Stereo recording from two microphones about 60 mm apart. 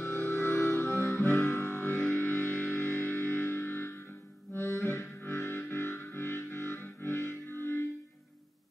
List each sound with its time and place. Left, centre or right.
0.0 s music: left
4.6 s harmonica: left
5.2 s music: left